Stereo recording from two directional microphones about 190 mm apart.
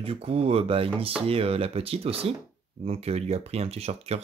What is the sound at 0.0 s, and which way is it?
Speech, 30° right (ahead or behind).